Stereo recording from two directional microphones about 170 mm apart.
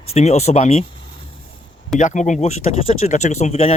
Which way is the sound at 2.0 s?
45° left (ahead or behind).